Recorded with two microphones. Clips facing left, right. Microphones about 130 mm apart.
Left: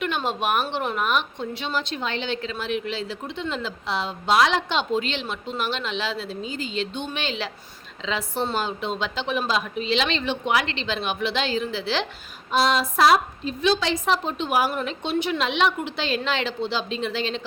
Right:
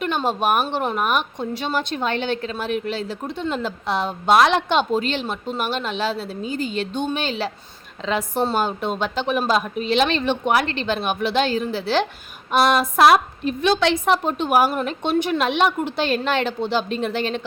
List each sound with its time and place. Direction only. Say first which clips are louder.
0.0 s a woman's voice: right 4 dB; 40° right (ahead or behind)
8.0 s a woman's voice: right 5 dB; 50° right (ahead or behind)
12.5 s a woman's voice: right 4 dB; 60° right (ahead or behind)